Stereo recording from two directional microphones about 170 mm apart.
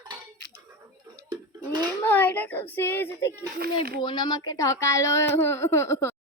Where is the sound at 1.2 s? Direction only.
25° right (ahead or behind).